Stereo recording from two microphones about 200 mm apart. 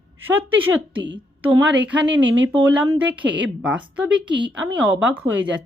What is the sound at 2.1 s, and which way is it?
Speech, 65° right (ahead or behind).